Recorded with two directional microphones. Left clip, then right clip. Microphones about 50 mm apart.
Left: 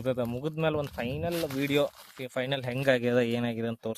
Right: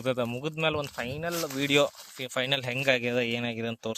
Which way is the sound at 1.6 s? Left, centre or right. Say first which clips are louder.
Right 5 dB; centre.